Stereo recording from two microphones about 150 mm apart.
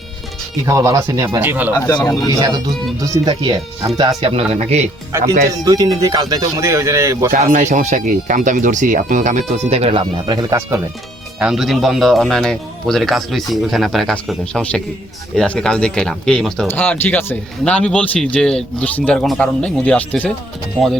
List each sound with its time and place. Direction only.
0.6 s speech: 20° right (ahead or behind)
2.0 s speech: 25° left (ahead or behind)
2.3 s speech: 25° right (ahead or behind)
4.2 s speech: 40° right (ahead or behind)
5.5 s speech: 25° right (ahead or behind)
7.3 s speech: 55° right (ahead or behind); by 10.8 s 20° right (ahead or behind)
11.3 s a man's voice: 5° right (ahead or behind)